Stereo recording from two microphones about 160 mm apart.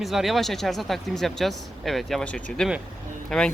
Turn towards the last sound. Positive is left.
turn(degrees=0)  # may be behind; listen again after turning